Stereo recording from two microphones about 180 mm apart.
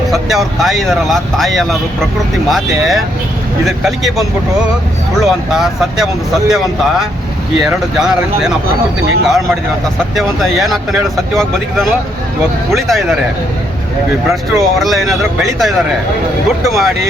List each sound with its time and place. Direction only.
0.1 s speech: centre (ahead or behind)
14.3 s speech: centre (ahead or behind)